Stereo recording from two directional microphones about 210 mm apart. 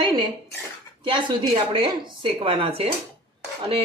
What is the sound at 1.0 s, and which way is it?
Speech, 25° right (ahead or behind).